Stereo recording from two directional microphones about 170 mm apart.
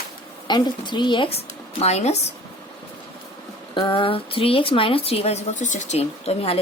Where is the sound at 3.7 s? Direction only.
30° left (ahead or behind).